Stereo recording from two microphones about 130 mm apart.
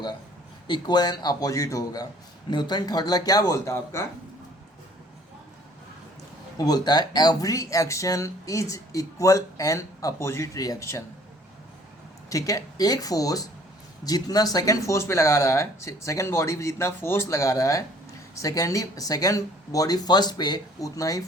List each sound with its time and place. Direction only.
0.7 s speech: 30° left (ahead or behind)
6.6 s speech: 30° left (ahead or behind)
12.3 s speech: 25° left (ahead or behind)